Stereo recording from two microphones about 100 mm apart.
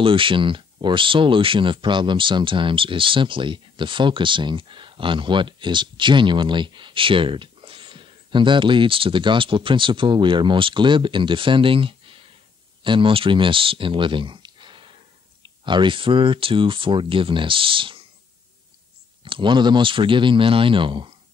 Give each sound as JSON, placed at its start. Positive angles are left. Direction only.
{"t": 0.0, "sound": "speech", "side_deg": -60}
{"t": 19.2, "sound": "speech", "side_deg": -55}